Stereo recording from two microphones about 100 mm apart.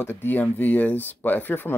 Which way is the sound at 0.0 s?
20° left (ahead or behind).